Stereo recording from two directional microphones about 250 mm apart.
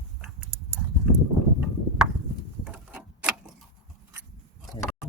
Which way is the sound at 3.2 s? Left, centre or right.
Centre.